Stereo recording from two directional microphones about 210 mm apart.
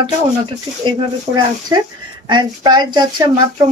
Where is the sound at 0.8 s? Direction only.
20° right (ahead or behind).